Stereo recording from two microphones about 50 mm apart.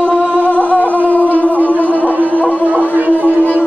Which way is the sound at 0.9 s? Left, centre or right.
Left.